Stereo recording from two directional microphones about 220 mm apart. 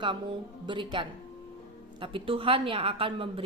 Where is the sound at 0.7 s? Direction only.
20° right (ahead or behind).